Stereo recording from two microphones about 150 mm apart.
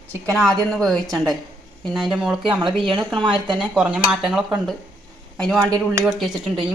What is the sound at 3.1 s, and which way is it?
Speech, 35° right (ahead or behind).